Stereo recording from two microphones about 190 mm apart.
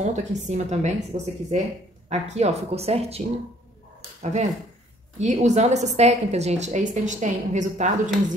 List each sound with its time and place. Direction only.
0.0 s a woman's voice: 40° right (ahead or behind)